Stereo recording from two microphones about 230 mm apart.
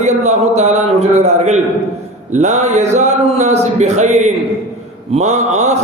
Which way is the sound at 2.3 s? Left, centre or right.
Right.